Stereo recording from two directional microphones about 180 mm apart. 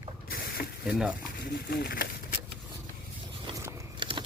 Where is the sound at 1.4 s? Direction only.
60° left (ahead or behind).